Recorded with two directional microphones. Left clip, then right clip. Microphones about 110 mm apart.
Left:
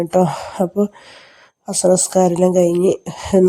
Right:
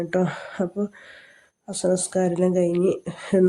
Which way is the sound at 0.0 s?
30° left (ahead or behind).